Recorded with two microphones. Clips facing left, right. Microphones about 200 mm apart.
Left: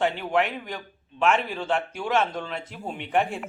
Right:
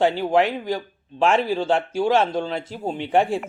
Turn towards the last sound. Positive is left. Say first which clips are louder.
# right 5 dB
turn(degrees=-30)  # may be behind; listen again after turning